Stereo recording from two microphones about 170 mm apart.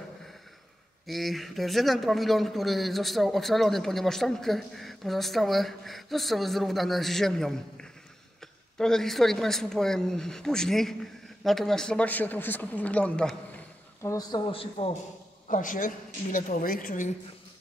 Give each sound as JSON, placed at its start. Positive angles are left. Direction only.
{"t": 1.0, "sound": "speech", "side_deg": 0}
{"t": 14.0, "sound": "speech", "side_deg": 20}
{"t": 14.5, "sound": "a man's voice", "side_deg": 35}
{"t": 15.4, "sound": "a woman's voice", "side_deg": 50}